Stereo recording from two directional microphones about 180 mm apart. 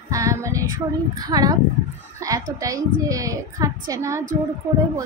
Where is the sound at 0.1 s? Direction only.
15° right (ahead or behind).